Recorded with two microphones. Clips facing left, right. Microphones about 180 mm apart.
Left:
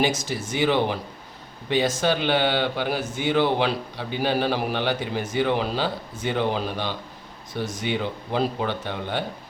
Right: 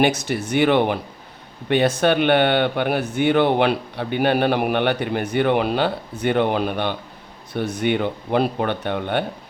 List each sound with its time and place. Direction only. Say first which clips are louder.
0.0 s speech: right 5 dB; 65° right (ahead or behind)